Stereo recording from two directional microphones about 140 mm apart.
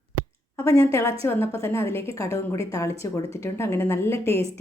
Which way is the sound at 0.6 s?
20° left (ahead or behind).